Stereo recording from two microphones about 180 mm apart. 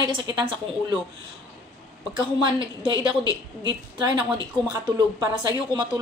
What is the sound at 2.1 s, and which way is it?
A woman's voice, 25° right (ahead or behind).